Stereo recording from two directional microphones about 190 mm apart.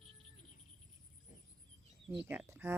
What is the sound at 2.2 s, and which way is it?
Speech, 10° right (ahead or behind).